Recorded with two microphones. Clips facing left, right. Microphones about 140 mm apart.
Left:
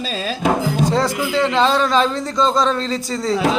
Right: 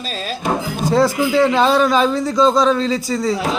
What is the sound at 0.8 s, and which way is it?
A man's voice, 10° right (ahead or behind).